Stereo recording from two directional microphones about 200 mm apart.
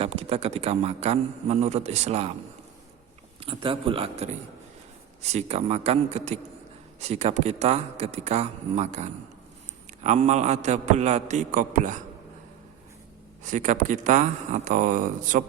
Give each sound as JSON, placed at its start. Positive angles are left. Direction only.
{"t": 0.0, "sound": "a man's voice", "side_deg": -30}
{"t": 3.4, "sound": "a man's voice", "side_deg": -25}
{"t": 13.4, "sound": "a man's voice", "side_deg": -40}